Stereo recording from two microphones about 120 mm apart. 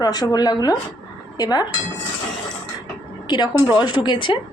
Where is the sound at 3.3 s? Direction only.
35° left (ahead or behind).